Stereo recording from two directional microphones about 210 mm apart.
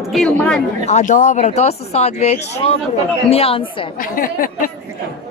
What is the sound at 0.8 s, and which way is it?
A woman's voice, 35° left (ahead or behind).